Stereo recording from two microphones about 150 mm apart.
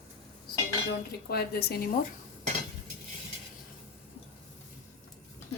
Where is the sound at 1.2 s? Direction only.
90° left.